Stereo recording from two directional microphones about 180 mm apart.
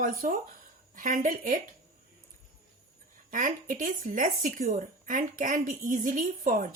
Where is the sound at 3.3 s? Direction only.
45° right (ahead or behind).